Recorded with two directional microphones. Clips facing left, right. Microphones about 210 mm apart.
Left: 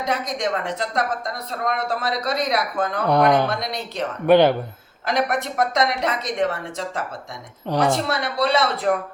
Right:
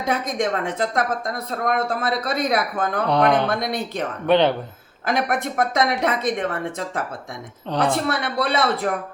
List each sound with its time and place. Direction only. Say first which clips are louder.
0.0 s a woman's voice: right 2 dB; 55° right (ahead or behind)
3.1 s speech: left 2 dB; 10° left (ahead or behind)
3.6 s a woman's voice: right 3 dB; 50° right (ahead or behind)
4.3 s speech: left 3 dB; 10° left (ahead or behind)
5.0 s a woman's voice: even; 50° right (ahead or behind)
7.7 s speech: left 2 dB; 10° left (ahead or behind)
8.0 s a woman's voice: left 1 dB; 55° right (ahead or behind)